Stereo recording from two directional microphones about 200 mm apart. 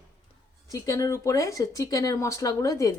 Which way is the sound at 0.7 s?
15° left (ahead or behind).